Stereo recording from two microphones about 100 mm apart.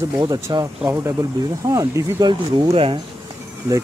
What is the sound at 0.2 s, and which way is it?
Speech, 50° right (ahead or behind).